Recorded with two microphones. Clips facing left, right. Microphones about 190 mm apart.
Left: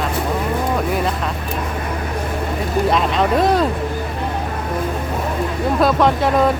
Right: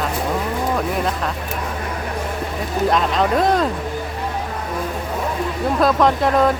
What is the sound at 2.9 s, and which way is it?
Speech, centre (ahead or behind).